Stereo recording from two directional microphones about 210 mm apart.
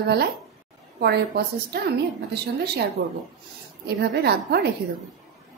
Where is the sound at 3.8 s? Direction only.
50° right (ahead or behind).